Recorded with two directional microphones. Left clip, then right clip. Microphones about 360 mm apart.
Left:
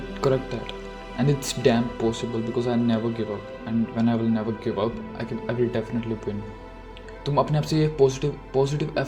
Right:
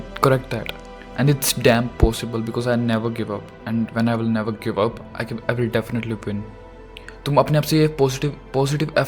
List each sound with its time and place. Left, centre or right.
0.2 s speech: right